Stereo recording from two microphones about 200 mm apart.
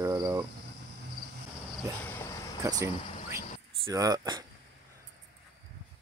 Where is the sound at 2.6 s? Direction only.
15° right (ahead or behind).